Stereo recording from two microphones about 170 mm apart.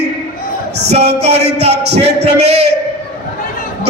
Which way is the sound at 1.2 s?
35° right (ahead or behind).